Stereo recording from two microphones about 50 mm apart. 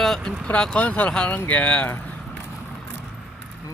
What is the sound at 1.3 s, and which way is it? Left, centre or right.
Speech, left.